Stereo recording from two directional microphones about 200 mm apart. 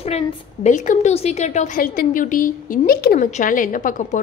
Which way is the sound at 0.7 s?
35° left (ahead or behind).